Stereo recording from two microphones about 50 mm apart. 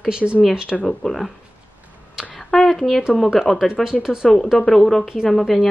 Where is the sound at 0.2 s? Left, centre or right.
Centre.